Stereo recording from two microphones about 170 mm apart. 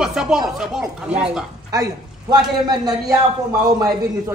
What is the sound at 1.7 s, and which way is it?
Speech, 20° right (ahead or behind).